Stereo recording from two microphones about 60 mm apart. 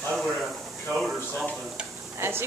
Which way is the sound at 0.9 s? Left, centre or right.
Centre.